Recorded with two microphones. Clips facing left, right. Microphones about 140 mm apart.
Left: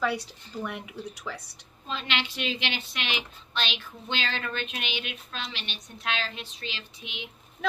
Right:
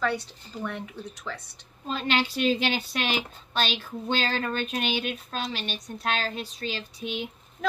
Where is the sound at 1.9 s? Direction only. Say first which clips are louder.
Right 6 dB; 40° right (ahead or behind).